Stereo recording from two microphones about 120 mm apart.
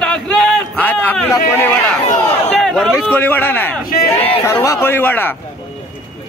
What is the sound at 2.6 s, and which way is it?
Speech, centre (ahead or behind).